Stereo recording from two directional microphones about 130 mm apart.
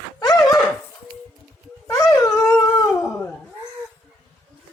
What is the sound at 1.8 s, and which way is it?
Dog, 25° left (ahead or behind).